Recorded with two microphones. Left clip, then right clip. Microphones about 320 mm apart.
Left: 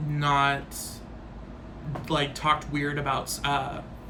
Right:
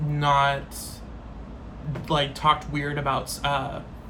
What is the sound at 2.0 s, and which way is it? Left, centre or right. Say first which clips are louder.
A man's voice: right 3 dB; centre.